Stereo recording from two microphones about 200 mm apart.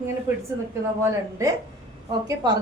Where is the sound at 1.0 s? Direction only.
15° right (ahead or behind).